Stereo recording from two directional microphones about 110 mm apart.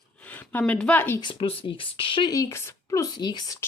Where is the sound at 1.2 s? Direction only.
50° left (ahead or behind).